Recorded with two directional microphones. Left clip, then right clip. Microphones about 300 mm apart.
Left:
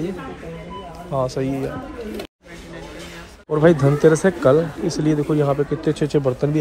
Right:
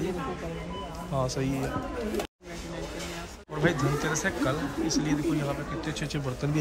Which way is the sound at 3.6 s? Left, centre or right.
Centre.